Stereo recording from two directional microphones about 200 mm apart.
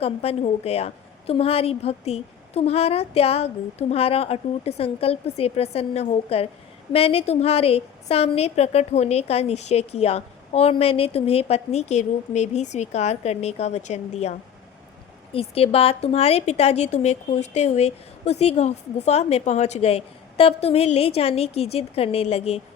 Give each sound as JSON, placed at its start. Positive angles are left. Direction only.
{"t": 0.0, "sound": "a woman's voice", "side_deg": 30}